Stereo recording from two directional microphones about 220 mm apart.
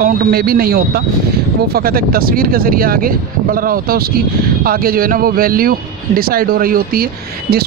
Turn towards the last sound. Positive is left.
turn(degrees=-45)  # may be behind; listen again after turning